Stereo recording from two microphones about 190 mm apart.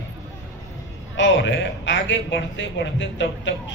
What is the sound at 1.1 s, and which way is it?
A man's voice, 75° left (ahead or behind).